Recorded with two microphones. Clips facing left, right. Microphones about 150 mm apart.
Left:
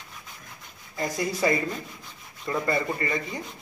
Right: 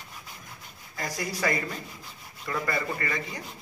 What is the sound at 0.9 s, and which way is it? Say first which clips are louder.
Speech: left 5 dB; 20° left (ahead or behind).